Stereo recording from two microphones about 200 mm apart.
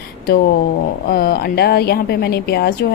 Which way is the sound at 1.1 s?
50° left (ahead or behind).